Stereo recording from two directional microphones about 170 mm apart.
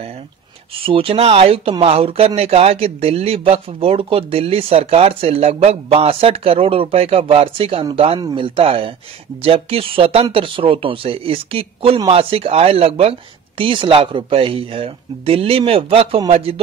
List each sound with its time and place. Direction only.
0.8 s speech: 35° right (ahead or behind)